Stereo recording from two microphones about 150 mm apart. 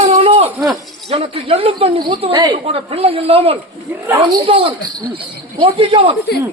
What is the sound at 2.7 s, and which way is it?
Speech, 40° right (ahead or behind).